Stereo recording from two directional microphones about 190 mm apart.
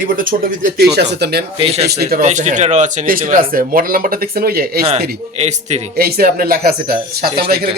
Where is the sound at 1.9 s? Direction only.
55° right (ahead or behind).